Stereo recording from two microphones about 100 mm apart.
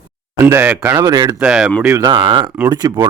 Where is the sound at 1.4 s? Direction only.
10° right (ahead or behind).